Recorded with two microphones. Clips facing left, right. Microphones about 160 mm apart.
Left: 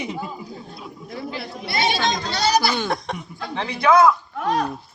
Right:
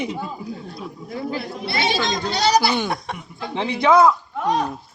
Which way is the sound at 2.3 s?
30° right (ahead or behind).